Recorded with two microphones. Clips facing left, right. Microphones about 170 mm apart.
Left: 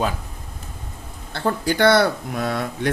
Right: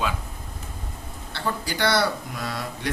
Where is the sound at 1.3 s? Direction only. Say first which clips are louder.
Left 7 dB; 50° left (ahead or behind).